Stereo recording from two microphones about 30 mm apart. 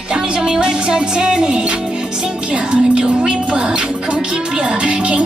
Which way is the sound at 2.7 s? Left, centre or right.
Right.